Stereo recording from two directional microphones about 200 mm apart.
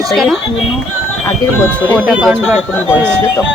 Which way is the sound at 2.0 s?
5° right (ahead or behind).